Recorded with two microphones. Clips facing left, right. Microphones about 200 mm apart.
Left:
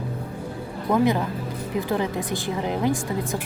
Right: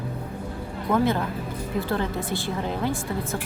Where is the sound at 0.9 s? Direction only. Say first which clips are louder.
Left 2 dB; 15° left (ahead or behind).